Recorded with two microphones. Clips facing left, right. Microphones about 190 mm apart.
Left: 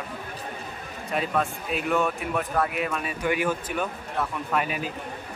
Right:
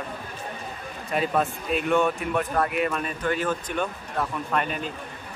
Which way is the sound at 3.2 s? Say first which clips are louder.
Left 1 dB; 10° left (ahead or behind).